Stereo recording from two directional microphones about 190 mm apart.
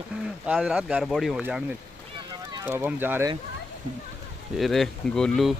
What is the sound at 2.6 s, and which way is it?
Speech, 10° right (ahead or behind).